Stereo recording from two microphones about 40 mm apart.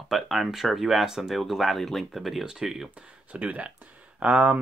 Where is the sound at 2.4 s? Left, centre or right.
Centre.